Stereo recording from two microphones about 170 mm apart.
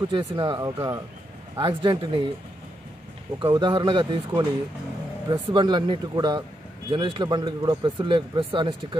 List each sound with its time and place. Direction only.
0.1 s a man's voice: 25° right (ahead or behind)
3.4 s a man's voice: 25° right (ahead or behind)